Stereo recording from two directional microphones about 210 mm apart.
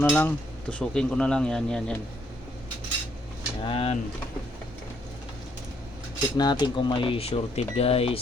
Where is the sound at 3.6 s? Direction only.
25° left (ahead or behind).